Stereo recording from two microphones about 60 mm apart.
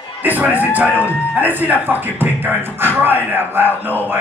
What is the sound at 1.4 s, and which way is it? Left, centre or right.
Speech, right.